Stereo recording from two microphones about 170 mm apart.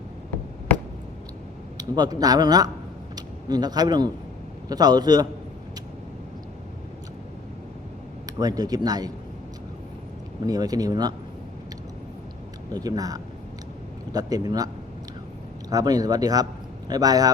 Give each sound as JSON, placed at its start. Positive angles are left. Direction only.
{"t": 1.8, "sound": "speech", "side_deg": -20}
{"t": 8.3, "sound": "speech", "side_deg": -25}
{"t": 10.4, "sound": "speech", "side_deg": -20}
{"t": 12.7, "sound": "speech", "side_deg": -20}
{"t": 15.7, "sound": "speech", "side_deg": -20}